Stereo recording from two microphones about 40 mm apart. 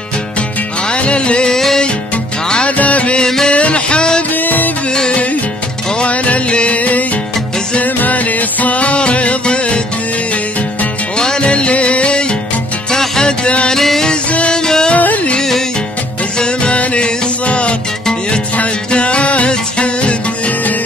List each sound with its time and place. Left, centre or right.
0.8 s music: left
1.5 s music: centre
2.8 s music: left
4.3 s music: left
5.9 s music: left
11.1 s music: left
12.9 s music: centre
13.7 s music: centre
15.0 s music: left
16.3 s music: left